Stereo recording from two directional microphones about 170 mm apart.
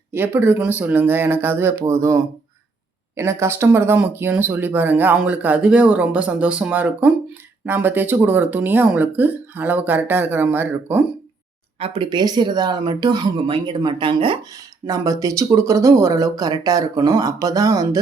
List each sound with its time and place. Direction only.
0.1 s speech: 10° right (ahead or behind)
11.8 s speech: 30° right (ahead or behind)
14.8 s speech: 20° right (ahead or behind)